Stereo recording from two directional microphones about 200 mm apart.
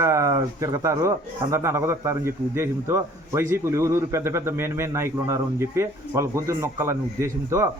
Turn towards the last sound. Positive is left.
turn(degrees=-15)  # may be behind; listen again after turning